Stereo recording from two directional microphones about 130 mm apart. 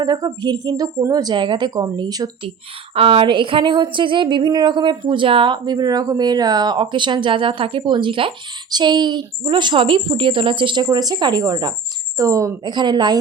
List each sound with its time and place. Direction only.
0.0 s speech: 30° right (ahead or behind)
2.9 s speech: 45° right (ahead or behind); by 12.7 s 25° right (ahead or behind)
12.7 s speech: 35° right (ahead or behind)